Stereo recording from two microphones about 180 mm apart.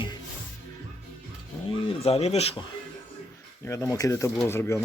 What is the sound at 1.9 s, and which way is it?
Speech, 35° left (ahead or behind).